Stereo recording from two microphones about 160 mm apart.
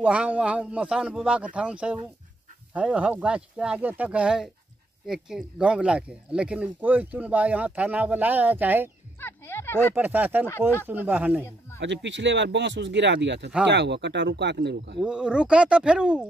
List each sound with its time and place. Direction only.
0.0 s speech: 10° right (ahead or behind)
9.2 s speech: 15° left (ahead or behind)
9.9 s speech: 10° right (ahead or behind)
11.9 s speech: 90° right
15.0 s speech: 5° right (ahead or behind)